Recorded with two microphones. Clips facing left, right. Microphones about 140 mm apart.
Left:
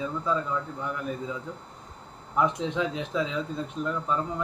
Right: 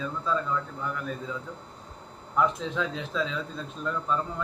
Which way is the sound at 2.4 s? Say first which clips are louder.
Left 1 dB; 20° left (ahead or behind).